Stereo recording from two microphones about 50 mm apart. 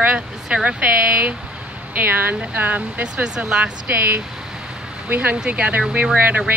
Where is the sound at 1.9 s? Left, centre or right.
Right.